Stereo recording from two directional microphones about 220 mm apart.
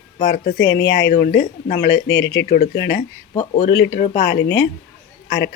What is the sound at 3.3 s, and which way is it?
Speech, 30° left (ahead or behind).